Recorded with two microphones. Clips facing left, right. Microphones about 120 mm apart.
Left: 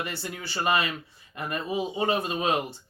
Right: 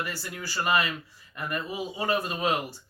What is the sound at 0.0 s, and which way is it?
Speech, 25° left (ahead or behind).